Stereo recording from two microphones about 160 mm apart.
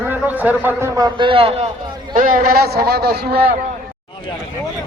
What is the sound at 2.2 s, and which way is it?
A man's voice, 55° right (ahead or behind).